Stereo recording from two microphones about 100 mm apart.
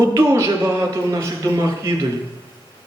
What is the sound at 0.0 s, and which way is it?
Speech, 30° right (ahead or behind).